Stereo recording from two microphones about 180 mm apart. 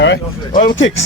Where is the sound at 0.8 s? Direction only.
90° left.